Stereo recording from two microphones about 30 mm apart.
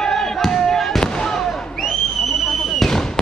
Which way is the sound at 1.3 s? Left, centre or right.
Centre.